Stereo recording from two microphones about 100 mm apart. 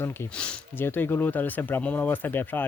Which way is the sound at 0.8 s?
20° left (ahead or behind).